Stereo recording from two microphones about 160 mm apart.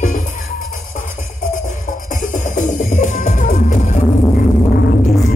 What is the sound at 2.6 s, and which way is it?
Music, 55° left (ahead or behind).